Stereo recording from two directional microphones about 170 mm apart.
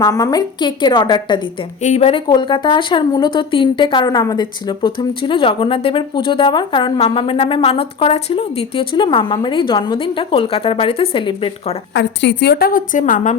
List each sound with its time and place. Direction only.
0.0 s speech: 20° left (ahead or behind)
1.8 s speech: 40° left (ahead or behind)
2.2 s speech: 25° left (ahead or behind)
11.9 s a woman's voice: 90° left; by 13.3 s 50° left (ahead or behind)